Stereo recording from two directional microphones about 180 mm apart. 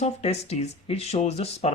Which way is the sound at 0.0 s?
35° left (ahead or behind).